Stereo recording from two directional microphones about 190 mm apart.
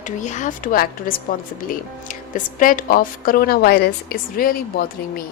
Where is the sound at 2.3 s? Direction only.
45° left (ahead or behind).